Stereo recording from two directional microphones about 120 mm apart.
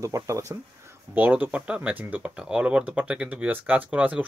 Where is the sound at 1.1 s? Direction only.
15° right (ahead or behind).